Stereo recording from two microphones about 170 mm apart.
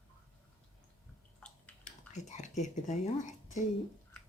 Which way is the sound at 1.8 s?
45° left (ahead or behind).